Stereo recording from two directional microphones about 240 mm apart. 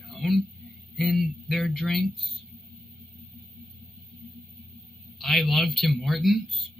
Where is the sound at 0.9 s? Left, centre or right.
Centre.